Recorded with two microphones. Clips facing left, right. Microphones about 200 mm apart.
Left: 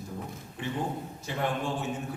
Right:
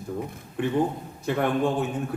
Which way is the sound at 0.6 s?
55° right (ahead or behind).